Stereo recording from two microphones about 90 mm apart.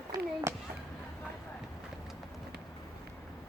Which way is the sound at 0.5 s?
30° right (ahead or behind).